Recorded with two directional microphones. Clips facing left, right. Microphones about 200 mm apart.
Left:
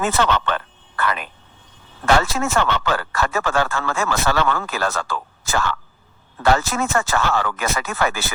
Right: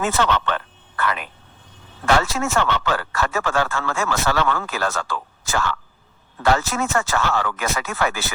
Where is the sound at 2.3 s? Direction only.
35° left (ahead or behind).